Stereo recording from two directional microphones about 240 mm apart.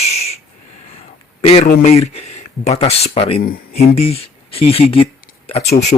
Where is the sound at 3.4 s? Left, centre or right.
Left.